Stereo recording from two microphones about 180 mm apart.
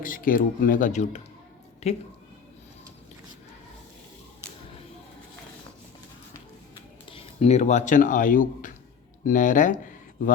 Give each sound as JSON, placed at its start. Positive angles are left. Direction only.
{"t": 0.0, "sound": "a woman's voice", "side_deg": 50}
{"t": 7.1, "sound": "speech", "side_deg": 35}